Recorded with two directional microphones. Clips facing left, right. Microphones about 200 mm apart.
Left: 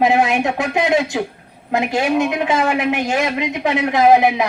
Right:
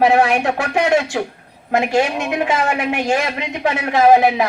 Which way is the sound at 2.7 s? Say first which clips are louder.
Even; 20° left (ahead or behind).